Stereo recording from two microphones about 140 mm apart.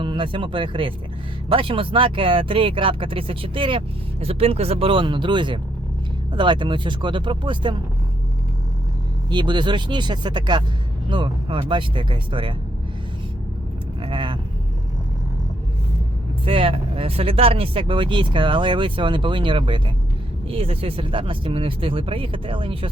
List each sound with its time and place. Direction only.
0.0 s speech: 35° right (ahead or behind)
9.3 s speech: 35° right (ahead or behind)
14.0 s vehicle: 35° right (ahead or behind)
16.5 s speech: 40° right (ahead or behind)